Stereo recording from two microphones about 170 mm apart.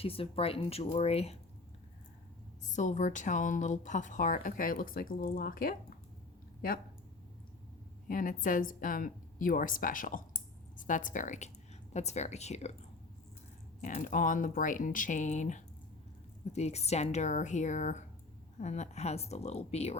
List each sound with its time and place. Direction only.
0.0 s speech: 35° left (ahead or behind)
2.6 s a woman's voice: 45° left (ahead or behind)
8.0 s a woman's voice: 55° left (ahead or behind)
13.8 s a woman's voice: 50° left (ahead or behind)